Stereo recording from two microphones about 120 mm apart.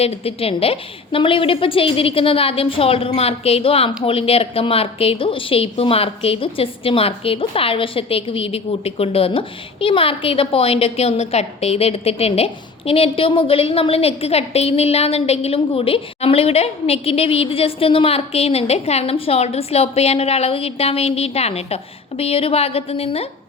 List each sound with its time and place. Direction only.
0.0 s a woman's voice: 60° left (ahead or behind)